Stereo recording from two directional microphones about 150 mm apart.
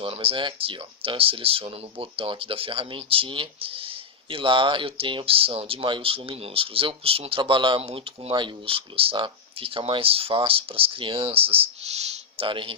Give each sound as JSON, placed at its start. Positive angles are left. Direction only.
{"t": 0.0, "sound": "speech", "side_deg": -40}